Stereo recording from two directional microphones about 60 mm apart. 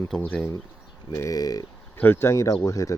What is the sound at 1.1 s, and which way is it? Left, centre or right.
Speech, left.